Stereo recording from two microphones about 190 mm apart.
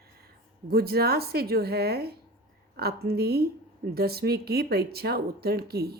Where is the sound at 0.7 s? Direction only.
55° right (ahead or behind).